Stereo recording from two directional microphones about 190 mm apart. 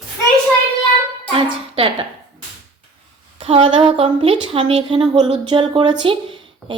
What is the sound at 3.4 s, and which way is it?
A woman's voice, 30° right (ahead or behind).